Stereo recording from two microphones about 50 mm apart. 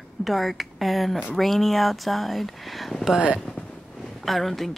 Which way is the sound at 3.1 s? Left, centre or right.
Centre.